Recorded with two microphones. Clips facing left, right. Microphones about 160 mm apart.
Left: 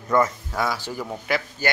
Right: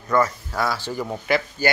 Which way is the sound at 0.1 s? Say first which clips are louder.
Even; 20° left (ahead or behind).